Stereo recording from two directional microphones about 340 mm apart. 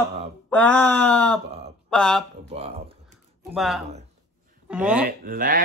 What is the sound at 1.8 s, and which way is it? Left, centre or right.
Speech, centre.